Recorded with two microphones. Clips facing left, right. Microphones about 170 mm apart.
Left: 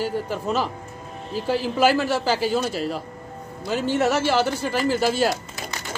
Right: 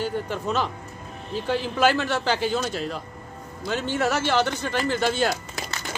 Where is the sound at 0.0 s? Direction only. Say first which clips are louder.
Left 2 dB; 5° left (ahead or behind).